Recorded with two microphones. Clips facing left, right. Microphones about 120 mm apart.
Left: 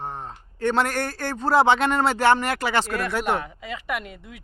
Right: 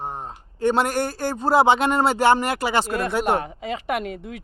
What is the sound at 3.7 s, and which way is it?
Speech, 75° right (ahead or behind).